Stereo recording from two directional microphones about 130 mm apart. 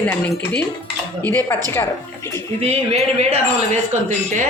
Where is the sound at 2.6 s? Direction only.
55° right (ahead or behind).